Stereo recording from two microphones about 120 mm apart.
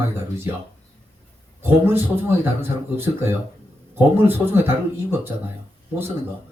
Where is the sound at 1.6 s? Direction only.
20° right (ahead or behind).